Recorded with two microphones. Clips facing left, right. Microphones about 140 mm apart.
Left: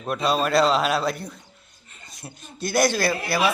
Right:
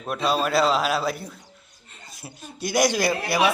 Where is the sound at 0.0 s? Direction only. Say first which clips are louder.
Left 1 dB; centre (ahead or behind).